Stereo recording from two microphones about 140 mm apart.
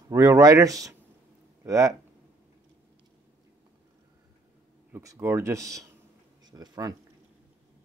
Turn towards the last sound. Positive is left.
turn(degrees=-25)  # may be behind; listen again after turning